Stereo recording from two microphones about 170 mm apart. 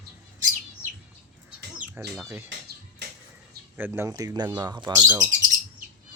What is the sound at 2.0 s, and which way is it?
Speech, 15° right (ahead or behind).